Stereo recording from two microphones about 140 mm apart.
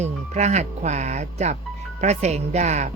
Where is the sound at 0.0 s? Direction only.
55° right (ahead or behind).